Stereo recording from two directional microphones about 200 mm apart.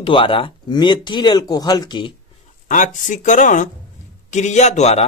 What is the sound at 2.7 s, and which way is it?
A man's voice, 40° left (ahead or behind).